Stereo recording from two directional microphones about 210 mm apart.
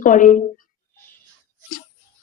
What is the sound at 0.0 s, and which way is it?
Speech, 40° left (ahead or behind).